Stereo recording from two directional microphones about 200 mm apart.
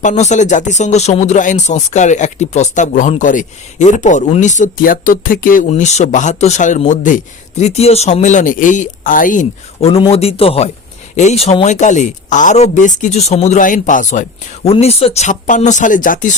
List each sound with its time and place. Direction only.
0.0 s speech: 35° left (ahead or behind)